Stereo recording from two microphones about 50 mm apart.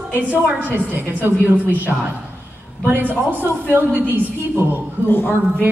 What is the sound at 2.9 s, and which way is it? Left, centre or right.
A woman's voice, right.